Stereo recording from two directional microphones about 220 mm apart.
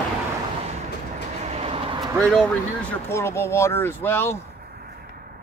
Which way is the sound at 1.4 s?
25° right (ahead or behind).